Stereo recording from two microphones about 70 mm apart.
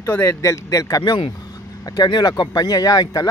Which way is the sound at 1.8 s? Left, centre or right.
Left.